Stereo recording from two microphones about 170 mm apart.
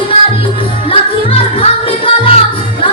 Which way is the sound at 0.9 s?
35° left (ahead or behind).